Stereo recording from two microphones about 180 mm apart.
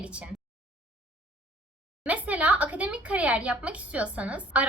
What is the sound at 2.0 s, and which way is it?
A woman's voice, 10° right (ahead or behind).